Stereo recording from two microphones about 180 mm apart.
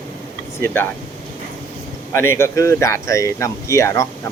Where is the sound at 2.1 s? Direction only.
15° left (ahead or behind).